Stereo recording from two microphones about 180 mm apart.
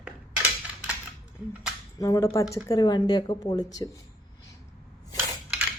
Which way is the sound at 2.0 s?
15° left (ahead or behind).